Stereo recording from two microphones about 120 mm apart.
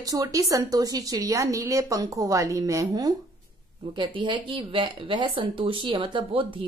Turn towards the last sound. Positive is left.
turn(degrees=-45)  # may be behind; listen again after turning